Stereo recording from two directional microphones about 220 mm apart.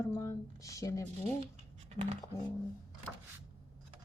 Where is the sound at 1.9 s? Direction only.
30° right (ahead or behind).